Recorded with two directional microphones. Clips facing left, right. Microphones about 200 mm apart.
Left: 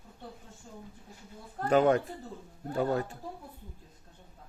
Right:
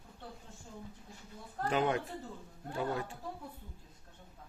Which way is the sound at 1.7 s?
40° left (ahead or behind).